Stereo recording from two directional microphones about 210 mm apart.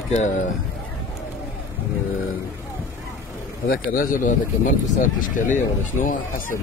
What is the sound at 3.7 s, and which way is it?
Speech, 40° left (ahead or behind).